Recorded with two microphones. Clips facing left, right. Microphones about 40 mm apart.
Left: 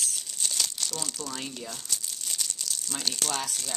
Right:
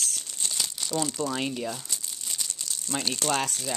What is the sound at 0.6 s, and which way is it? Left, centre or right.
Crumpling, centre.